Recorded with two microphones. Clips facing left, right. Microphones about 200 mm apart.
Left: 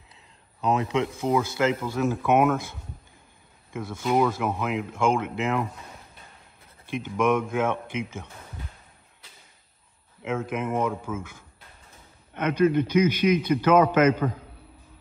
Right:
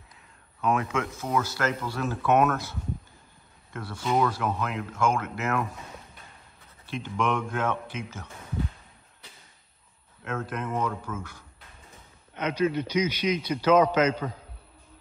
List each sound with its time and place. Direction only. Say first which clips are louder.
0.6 s speech: left 2 dB; 20° left (ahead or behind)
3.7 s speech: left 3 dB; 10° left (ahead or behind)
7.2 s speech: left 5 dB; 10° left (ahead or behind)
10.5 s speech: left 3 dB; 10° left (ahead or behind)
12.4 s a man's voice: left 5 dB; 55° left (ahead or behind)